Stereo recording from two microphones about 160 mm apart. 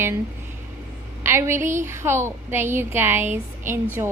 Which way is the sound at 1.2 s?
15° right (ahead or behind).